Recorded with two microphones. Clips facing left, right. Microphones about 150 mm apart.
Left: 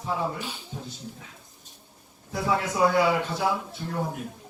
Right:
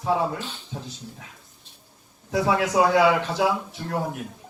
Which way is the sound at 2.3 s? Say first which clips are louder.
Right 4 dB; 90° right.